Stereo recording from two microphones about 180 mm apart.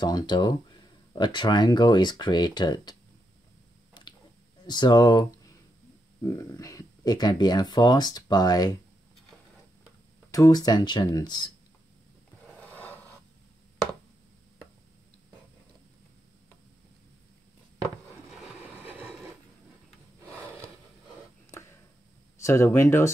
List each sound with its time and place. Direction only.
0.0 s speech: 25° left (ahead or behind)
4.6 s speech: 25° left (ahead or behind)
10.3 s speech: 20° left (ahead or behind)
12.4 s a sound: 10° left (ahead or behind)
18.6 s train: 10° right (ahead or behind)
20.3 s gasp: 15° right (ahead or behind)
21.5 s a sound: 15° left (ahead or behind)
22.4 s speech: 15° left (ahead or behind)